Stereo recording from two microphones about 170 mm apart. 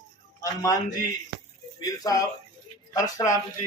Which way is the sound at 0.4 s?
20° left (ahead or behind).